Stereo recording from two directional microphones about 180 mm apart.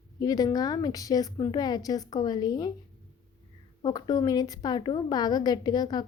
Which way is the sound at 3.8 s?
20° left (ahead or behind).